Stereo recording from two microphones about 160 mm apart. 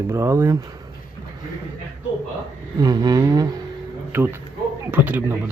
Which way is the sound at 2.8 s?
25° right (ahead or behind).